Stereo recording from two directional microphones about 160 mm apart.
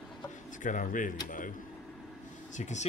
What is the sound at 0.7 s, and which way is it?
Speech, 55° left (ahead or behind).